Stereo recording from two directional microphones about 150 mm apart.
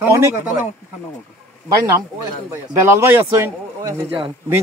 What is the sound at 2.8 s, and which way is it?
Speech, 15° right (ahead or behind).